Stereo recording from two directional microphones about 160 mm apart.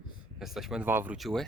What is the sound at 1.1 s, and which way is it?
Speech, centre (ahead or behind).